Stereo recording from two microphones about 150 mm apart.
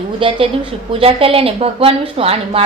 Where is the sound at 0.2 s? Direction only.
35° right (ahead or behind).